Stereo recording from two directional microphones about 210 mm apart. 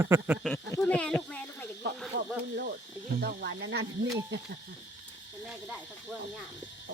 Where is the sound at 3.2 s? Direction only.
50° right (ahead or behind).